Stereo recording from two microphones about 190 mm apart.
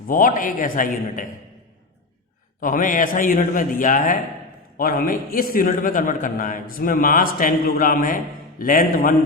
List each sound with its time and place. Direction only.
0.1 s a man's voice: 45° left (ahead or behind)
2.6 s a man's voice: 45° left (ahead or behind)